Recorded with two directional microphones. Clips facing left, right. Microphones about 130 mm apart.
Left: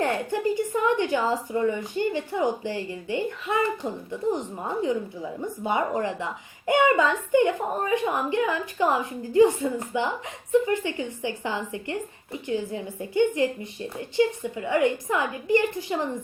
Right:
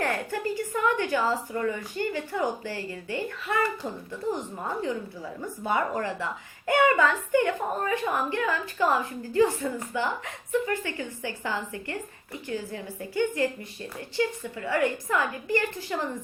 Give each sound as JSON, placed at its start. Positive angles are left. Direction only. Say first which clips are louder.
{"t": 0.0, "sound": "a woman's voice", "louder": "left 4 dB", "side_deg": 20}